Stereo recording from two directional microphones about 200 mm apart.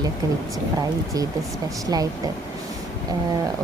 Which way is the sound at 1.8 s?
20° right (ahead or behind).